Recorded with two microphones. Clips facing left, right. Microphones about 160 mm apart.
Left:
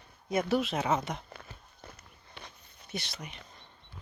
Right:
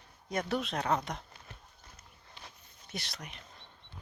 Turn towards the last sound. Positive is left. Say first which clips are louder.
# left 2 dB
turn(degrees=0)  # may be behind; listen again after turning